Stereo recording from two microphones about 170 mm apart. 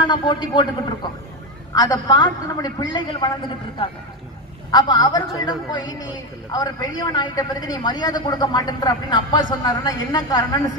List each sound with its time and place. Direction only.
0.0 s a woman's voice: 25° left (ahead or behind)